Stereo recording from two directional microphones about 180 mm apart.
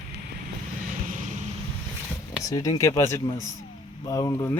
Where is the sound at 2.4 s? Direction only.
20° left (ahead or behind).